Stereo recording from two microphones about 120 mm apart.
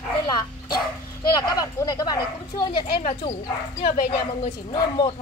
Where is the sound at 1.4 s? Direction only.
30° left (ahead or behind).